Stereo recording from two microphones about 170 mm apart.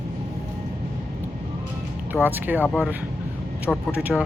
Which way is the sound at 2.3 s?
10° right (ahead or behind).